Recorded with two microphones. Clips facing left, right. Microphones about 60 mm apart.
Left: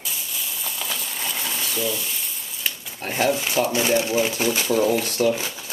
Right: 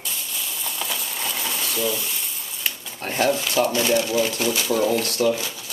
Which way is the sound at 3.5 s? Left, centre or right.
Centre.